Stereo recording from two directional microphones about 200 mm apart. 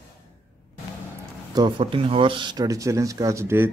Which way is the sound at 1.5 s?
25° right (ahead or behind).